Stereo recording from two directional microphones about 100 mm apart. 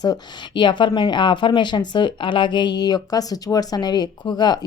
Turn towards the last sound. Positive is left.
turn(degrees=45)  # may be behind; listen again after turning